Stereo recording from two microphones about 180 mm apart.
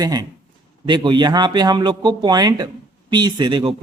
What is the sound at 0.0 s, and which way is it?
Speech, 20° right (ahead or behind).